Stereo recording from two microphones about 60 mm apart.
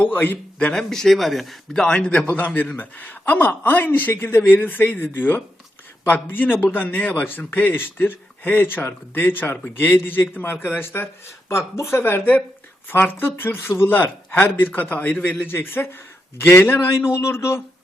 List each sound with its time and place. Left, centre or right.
0.0 s a man's voice: left
0.8 s speech: centre
1.9 s a man's voice: centre
2.3 s a man's voice: left